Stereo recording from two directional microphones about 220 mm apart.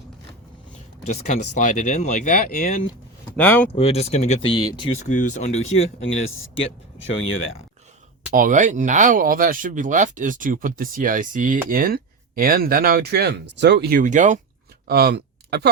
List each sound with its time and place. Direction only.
1.0 s speech: 30° left (ahead or behind)
3.3 s speech: 5° left (ahead or behind)
3.8 s speech: 25° left (ahead or behind)
6.0 s speech: 65° left (ahead or behind)
8.3 s speech: 40° right (ahead or behind)
14.0 s speech: 35° right (ahead or behind)
14.8 s speech: 45° right (ahead or behind)